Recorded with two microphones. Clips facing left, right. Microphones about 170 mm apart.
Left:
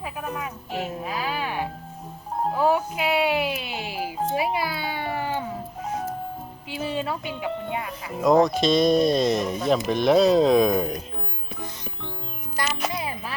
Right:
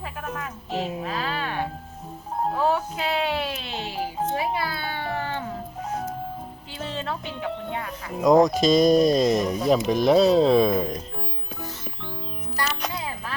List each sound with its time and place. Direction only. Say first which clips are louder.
0.0 s music: left 2 dB; 5° left (ahead or behind)
2.6 s music: left 2 dB; 10° left (ahead or behind)
4.4 s cat: left 2 dB; 10° left (ahead or behind)
6.7 s music: left 4 dB; 10° left (ahead or behind)
8.2 s speech: right 1 dB; 15° right (ahead or behind)
8.6 s speech: right 2 dB; 40° right (ahead or behind)
9.1 s speech: right 1 dB; centre (ahead or behind)
12.6 s music: even; 15° left (ahead or behind)
12.9 s child singing: left 2 dB; 15° left (ahead or behind)